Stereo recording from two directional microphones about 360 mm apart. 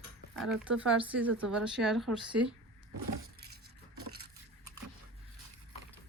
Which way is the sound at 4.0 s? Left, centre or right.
Right.